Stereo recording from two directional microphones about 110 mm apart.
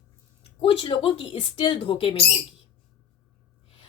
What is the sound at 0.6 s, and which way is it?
Speech, 50° left (ahead or behind).